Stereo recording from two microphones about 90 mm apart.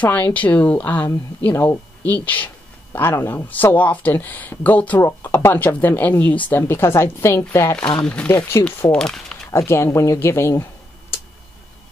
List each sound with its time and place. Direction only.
0.0 s speech: 20° left (ahead or behind)
1.5 s a woman's voice: 35° left (ahead or behind)
2.0 s speech: 20° left (ahead or behind)
6.7 s a woman's voice: 30° left (ahead or behind)
8.0 s speech: 15° left (ahead or behind)
8.3 s speech: 30° left (ahead or behind)
8.9 s speech: 5° left (ahead or behind)
9.5 s speech: 30° left (ahead or behind)